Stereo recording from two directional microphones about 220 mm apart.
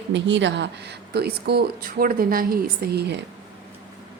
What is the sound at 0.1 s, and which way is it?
A woman's voice, 55° right (ahead or behind).